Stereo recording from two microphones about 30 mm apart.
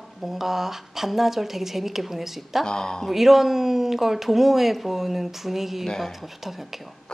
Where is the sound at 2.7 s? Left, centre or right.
Left.